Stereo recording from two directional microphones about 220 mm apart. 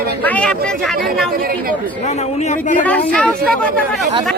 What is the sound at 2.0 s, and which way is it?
Speech, 30° left (ahead or behind).